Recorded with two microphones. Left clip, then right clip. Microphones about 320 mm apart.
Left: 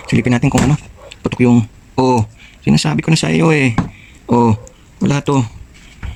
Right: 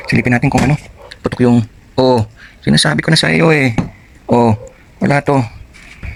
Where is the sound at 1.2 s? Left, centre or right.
Centre.